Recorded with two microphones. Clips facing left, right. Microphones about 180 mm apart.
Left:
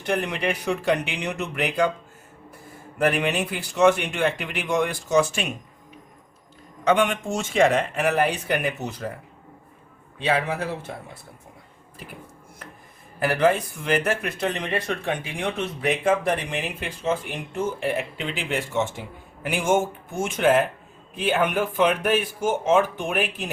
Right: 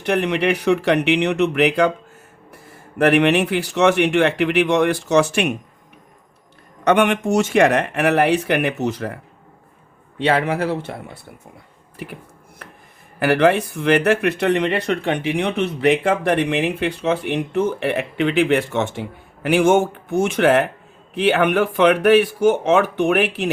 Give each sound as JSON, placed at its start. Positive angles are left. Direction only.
{"t": 0.0, "sound": "speech", "side_deg": -70}
{"t": 3.0, "sound": "speech", "side_deg": -70}
{"t": 6.8, "sound": "speech", "side_deg": -70}
{"t": 10.2, "sound": "speech", "side_deg": -75}
{"t": 13.1, "sound": "speech", "side_deg": -70}